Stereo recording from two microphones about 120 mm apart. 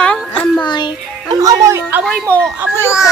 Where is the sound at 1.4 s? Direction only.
25° right (ahead or behind).